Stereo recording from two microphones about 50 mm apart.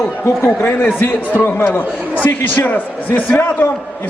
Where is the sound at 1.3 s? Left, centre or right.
Left.